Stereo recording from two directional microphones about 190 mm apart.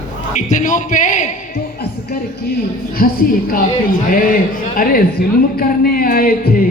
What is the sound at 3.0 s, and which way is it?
Speech, 50° left (ahead or behind).